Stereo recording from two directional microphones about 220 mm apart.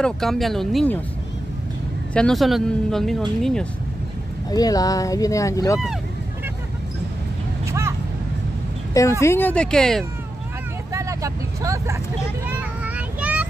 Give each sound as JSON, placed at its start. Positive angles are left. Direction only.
{"t": 0.0, "sound": "speech", "side_deg": 0}
{"t": 2.1, "sound": "speech", "side_deg": 0}
{"t": 4.5, "sound": "speech", "side_deg": 15}
{"t": 9.2, "sound": "speech", "side_deg": 10}
{"t": 10.9, "sound": "vehicle", "side_deg": -15}
{"t": 12.4, "sound": "child singing", "side_deg": -10}